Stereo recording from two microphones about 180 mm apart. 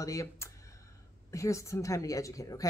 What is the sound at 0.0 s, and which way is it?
Speech, 15° left (ahead or behind).